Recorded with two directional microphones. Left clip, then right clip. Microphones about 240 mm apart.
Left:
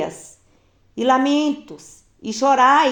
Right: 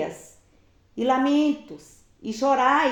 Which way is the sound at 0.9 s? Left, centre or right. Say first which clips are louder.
Left 4 dB; left.